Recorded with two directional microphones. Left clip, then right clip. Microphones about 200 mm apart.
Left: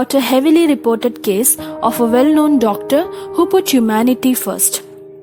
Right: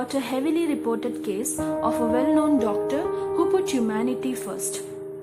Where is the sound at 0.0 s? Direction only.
50° left (ahead or behind).